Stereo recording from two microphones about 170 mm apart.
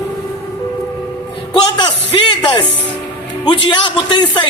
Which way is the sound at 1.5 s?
30° left (ahead or behind).